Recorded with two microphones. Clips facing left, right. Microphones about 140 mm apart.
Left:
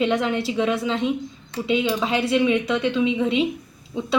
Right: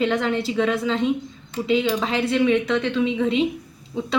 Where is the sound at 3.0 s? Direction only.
35° right (ahead or behind).